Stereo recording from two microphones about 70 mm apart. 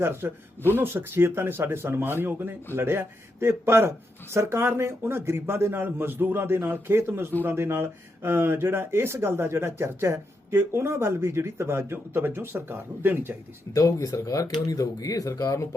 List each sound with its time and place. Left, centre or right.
0.0 s speech: right
13.7 s speech: left